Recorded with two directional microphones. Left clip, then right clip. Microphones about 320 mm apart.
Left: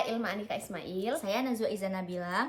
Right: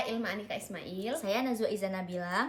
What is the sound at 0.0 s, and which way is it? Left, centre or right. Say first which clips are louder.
Speech: left 2 dB; centre.